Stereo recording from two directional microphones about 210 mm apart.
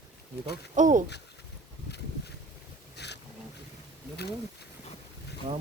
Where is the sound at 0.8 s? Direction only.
40° right (ahead or behind).